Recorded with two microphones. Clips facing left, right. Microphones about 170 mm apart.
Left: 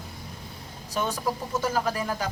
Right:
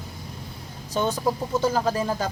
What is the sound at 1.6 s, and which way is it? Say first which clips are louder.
Speech: right 4 dB; 25° right (ahead or behind).